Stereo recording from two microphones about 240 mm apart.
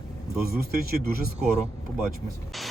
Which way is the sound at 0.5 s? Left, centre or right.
Right.